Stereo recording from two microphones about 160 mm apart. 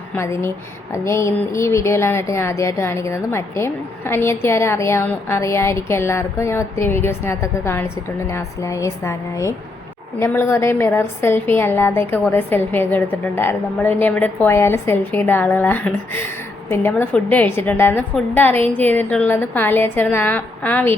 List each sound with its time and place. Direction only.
0.2 s a woman's voice: 15° left (ahead or behind)